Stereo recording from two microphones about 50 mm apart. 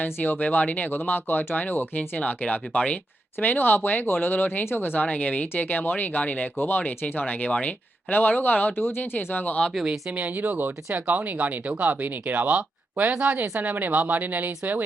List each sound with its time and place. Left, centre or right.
0.0 s speech: left
0.9 s speech: left
2.0 s speech: left
4.9 s speech: left
10.1 s speech: right